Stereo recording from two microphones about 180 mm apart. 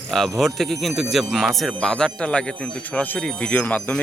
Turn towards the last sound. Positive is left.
turn(degrees=10)  # may be behind; listen again after turning